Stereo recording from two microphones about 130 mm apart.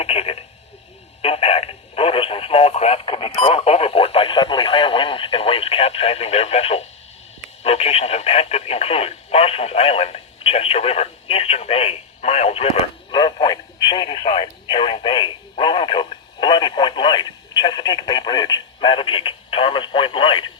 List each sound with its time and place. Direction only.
0.0 s radio: 50° left (ahead or behind)
7.6 s speech: 50° left (ahead or behind)
13.1 s radio: 35° left (ahead or behind)